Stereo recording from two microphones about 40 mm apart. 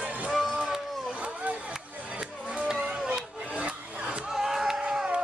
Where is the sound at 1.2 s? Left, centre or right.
Right.